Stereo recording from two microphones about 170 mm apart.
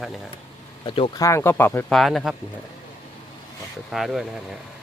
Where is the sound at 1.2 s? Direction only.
15° left (ahead or behind).